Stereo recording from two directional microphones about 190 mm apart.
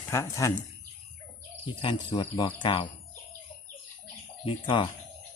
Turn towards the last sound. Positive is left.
turn(degrees=25)  # may be behind; listen again after turning